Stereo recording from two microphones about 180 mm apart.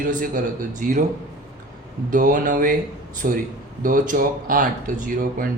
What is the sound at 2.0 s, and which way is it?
Speech, 45° right (ahead or behind).